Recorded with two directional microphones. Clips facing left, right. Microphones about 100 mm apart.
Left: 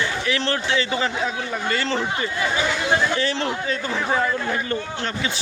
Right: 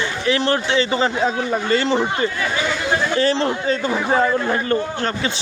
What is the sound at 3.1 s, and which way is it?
A man's voice, 35° right (ahead or behind).